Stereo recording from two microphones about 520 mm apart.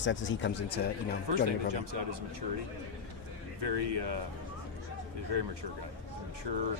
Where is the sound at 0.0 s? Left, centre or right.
Left.